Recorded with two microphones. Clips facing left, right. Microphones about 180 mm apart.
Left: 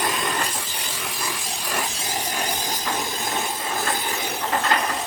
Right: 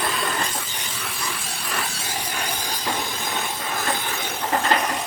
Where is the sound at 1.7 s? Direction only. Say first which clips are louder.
Left 2 dB; 15° left (ahead or behind).